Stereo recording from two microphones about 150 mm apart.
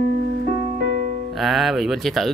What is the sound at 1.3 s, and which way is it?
Speech, centre (ahead or behind).